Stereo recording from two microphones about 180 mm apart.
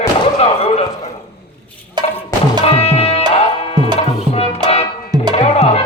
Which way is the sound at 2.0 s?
25° right (ahead or behind).